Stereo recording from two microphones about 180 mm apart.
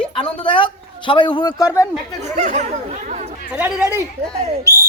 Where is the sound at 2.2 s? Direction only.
40° right (ahead or behind).